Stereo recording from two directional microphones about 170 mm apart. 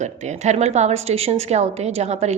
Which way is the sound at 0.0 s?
40° right (ahead or behind).